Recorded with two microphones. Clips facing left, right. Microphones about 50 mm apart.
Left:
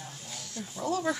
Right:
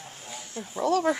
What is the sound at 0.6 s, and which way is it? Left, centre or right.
Speech, right.